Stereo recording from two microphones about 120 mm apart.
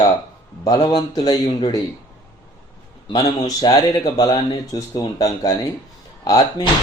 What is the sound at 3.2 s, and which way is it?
Speech, 30° left (ahead or behind).